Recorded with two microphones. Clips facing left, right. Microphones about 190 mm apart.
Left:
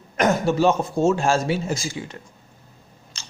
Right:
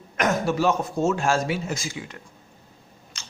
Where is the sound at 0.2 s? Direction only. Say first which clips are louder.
Left 4 dB; 30° left (ahead or behind).